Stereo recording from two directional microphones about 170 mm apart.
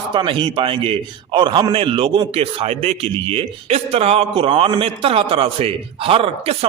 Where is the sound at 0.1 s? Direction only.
30° right (ahead or behind).